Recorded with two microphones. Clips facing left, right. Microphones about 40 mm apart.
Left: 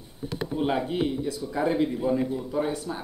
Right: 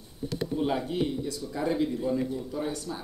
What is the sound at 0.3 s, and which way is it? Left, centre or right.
Speech, left.